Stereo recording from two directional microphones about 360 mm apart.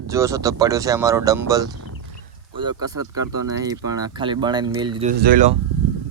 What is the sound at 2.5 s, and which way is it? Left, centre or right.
Speech, centre.